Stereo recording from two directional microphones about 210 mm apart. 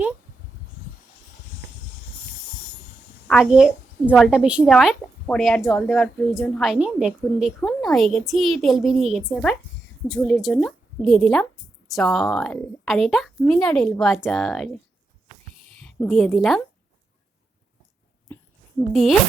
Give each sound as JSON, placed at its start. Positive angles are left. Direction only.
{"t": 3.2, "sound": "a woman's voice", "side_deg": 0}
{"t": 15.8, "sound": "a woman's voice", "side_deg": 0}